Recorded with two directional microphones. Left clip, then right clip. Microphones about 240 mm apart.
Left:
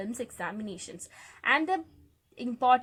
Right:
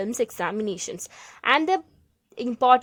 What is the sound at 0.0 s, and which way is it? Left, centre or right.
A woman's voice, right.